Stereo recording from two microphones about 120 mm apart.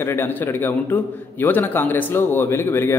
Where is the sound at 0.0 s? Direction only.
20° left (ahead or behind).